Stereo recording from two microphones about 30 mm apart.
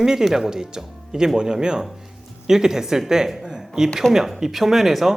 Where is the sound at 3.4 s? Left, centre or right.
Centre.